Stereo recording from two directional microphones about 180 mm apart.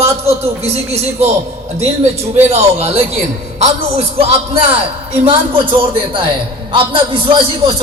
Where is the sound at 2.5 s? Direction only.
35° right (ahead or behind).